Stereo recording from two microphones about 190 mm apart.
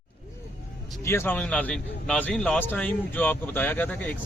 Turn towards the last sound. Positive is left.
turn(degrees=10)  # may be behind; listen again after turning